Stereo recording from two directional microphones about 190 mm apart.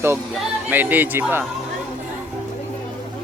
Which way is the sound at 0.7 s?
10° right (ahead or behind).